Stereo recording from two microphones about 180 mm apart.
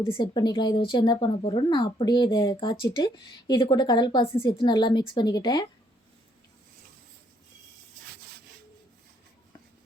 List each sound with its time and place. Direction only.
0.1 s speech: 25° left (ahead or behind)